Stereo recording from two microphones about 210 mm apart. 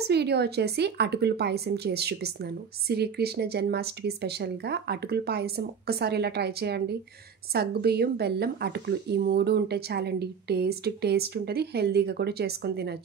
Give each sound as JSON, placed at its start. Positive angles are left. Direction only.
{"t": 0.1, "sound": "a woman's voice", "side_deg": -50}